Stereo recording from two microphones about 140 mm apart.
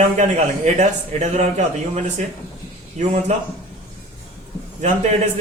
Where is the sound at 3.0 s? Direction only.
50° right (ahead or behind).